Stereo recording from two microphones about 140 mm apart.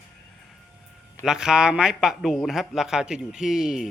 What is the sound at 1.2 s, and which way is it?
Speech, 5° right (ahead or behind).